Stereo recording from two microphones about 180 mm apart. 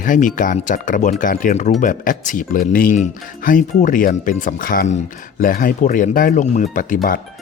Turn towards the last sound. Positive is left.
turn(degrees=50)  # may be behind; listen again after turning